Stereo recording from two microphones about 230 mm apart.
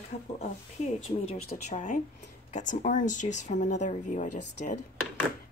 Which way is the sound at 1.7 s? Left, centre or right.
Left.